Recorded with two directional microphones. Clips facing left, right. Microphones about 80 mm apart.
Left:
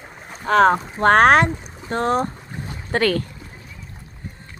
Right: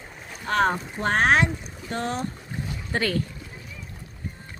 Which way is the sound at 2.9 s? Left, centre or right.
Left.